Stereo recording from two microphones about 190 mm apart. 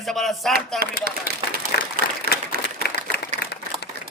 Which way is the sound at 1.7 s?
55° left (ahead or behind).